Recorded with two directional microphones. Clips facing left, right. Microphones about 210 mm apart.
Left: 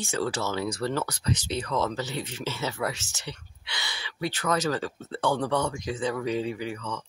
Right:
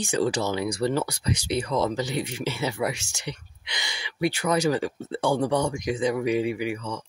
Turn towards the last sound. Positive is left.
turn(degrees=-10)  # may be behind; listen again after turning